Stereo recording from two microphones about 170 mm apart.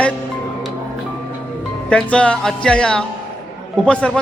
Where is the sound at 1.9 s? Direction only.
5° left (ahead or behind).